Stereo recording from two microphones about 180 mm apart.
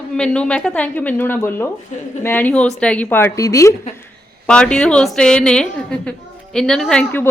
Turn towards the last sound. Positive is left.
turn(degrees=5)  # may be behind; listen again after turning